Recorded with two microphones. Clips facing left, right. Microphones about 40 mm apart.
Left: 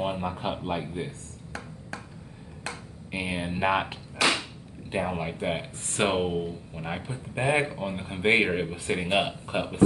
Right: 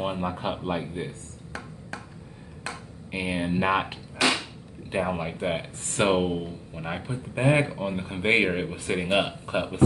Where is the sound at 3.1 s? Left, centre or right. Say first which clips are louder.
Right 3 dB; centre.